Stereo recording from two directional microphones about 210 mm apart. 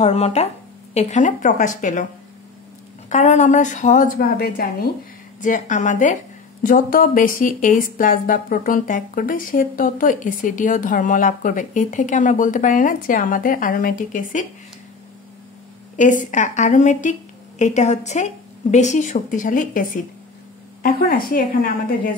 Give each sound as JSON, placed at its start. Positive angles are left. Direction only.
{"t": 0.0, "sound": "speech", "side_deg": 30}
{"t": 3.1, "sound": "speech", "side_deg": 35}
{"t": 16.0, "sound": "a woman's voice", "side_deg": 35}